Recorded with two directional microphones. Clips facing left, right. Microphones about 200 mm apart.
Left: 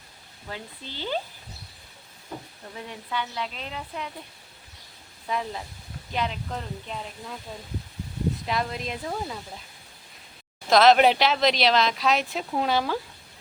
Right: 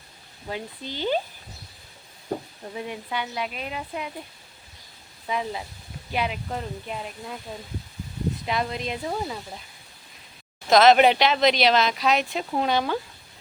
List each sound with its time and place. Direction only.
0.4 s speech: 15° right (ahead or behind)
2.7 s speech: 15° right (ahead or behind)
5.3 s speech: 5° right (ahead or behind)
8.4 s speech: centre (ahead or behind)
10.7 s speech: centre (ahead or behind)